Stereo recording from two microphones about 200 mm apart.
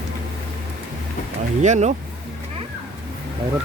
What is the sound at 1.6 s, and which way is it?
Speech, 35° right (ahead or behind).